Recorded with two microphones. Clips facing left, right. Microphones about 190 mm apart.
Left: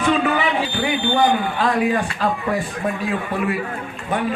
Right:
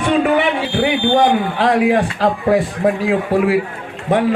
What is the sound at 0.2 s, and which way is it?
A man's voice, 65° right (ahead or behind).